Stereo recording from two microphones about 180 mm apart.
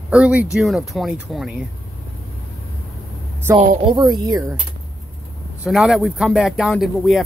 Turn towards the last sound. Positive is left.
turn(degrees=0)  # may be behind; listen again after turning